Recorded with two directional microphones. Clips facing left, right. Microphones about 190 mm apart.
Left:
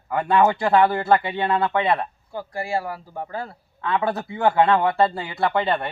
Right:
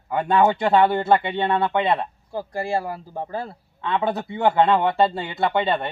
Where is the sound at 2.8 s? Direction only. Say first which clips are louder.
Right 1 dB; 30° right (ahead or behind).